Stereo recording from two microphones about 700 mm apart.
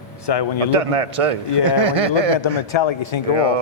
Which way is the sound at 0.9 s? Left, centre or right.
Right.